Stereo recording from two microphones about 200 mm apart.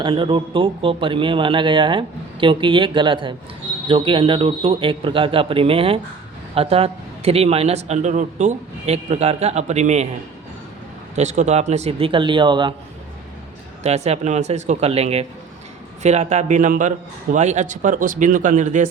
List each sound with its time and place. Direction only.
0.0 s a man's voice: 25° right (ahead or behind)
11.1 s speech: 35° right (ahead or behind)
13.8 s a man's voice: 35° right (ahead or behind)